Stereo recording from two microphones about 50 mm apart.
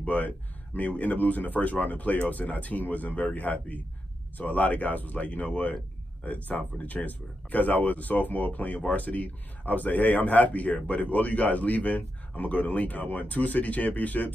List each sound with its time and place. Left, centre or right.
0.0 s speech: left